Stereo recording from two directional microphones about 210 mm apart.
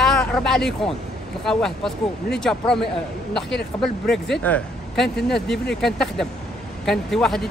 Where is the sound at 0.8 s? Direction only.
Centre (ahead or behind).